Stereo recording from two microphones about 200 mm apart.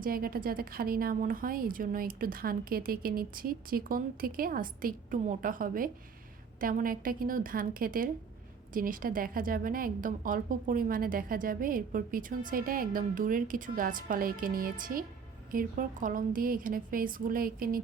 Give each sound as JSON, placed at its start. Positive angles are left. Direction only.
{"t": 0.0, "sound": "a woman's voice", "side_deg": -45}